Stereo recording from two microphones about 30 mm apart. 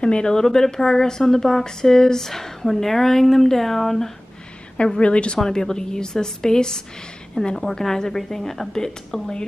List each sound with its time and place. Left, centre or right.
0.0 s speech: left
0.4 s speech: centre
5.0 s speech: left
5.4 s a woman's voice: centre